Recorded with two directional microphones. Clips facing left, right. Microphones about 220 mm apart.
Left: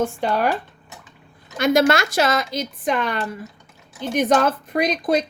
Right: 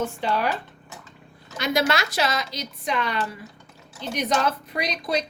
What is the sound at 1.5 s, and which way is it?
Speech, 50° left (ahead or behind).